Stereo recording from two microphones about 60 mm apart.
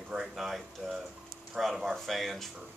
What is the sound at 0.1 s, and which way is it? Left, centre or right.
Speech, centre.